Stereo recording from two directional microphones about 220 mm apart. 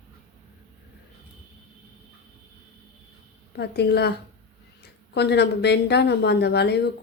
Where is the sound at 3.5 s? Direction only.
50° left (ahead or behind).